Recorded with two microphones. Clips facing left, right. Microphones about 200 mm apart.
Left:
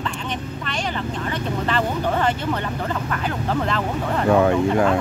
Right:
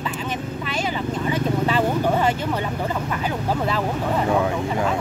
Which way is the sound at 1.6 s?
10° right (ahead or behind).